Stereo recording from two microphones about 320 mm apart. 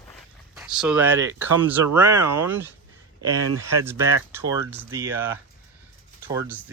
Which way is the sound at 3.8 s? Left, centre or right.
Centre.